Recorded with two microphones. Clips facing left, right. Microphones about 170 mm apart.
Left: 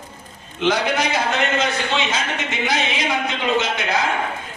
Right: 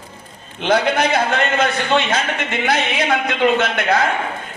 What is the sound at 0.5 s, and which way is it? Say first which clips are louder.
A man's voice: right 3 dB; 60° right (ahead or behind).